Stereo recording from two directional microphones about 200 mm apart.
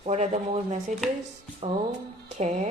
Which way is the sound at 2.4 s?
35° right (ahead or behind).